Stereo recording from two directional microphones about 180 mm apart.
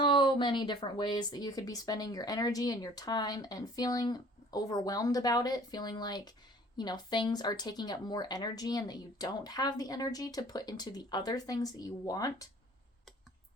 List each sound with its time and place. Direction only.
0.0 s a woman's voice: 25° left (ahead or behind)